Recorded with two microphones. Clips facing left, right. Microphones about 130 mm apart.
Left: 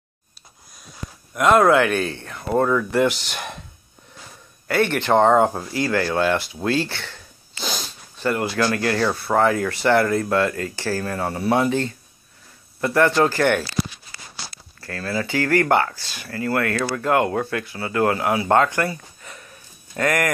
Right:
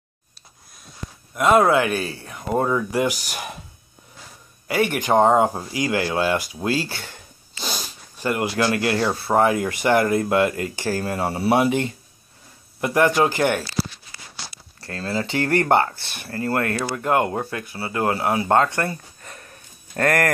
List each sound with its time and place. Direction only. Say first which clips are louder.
1.3 s speech: left 1 dB; 5° right (ahead or behind)
4.6 s speech: left 1 dB; 10° right (ahead or behind)
7.0 s a sound: left 1 dB; 40° right (ahead or behind)
7.6 s a sound: left 1 dB; centre (ahead or behind)
8.2 s speech: even; 15° right (ahead or behind)
11.4 s speech: right 1 dB; 15° right (ahead or behind)
14.1 s a sound: left 1 dB; 80° left
14.9 s speech: even; 25° right (ahead or behind)
16.3 s speech: even; 35° right (ahead or behind)
16.9 s speech: left 1 dB; 25° right (ahead or behind)
18.9 s a sound: left 1 dB; 45° right (ahead or behind)
20.0 s speech: right 1 dB; 50° right (ahead or behind)